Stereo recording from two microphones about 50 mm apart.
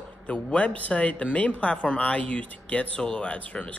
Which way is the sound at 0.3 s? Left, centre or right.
Left.